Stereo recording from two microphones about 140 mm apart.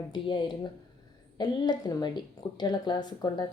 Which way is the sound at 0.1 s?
35° left (ahead or behind).